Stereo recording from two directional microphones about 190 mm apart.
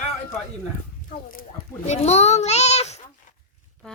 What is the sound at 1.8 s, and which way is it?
A child's voice, 35° left (ahead or behind).